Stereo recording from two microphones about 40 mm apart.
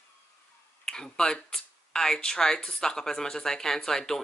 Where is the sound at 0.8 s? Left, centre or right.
Centre.